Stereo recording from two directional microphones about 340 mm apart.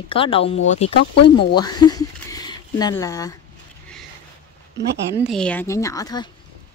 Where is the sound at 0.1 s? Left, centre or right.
Centre.